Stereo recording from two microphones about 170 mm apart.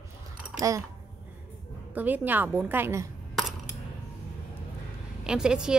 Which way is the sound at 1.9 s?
10° right (ahead or behind).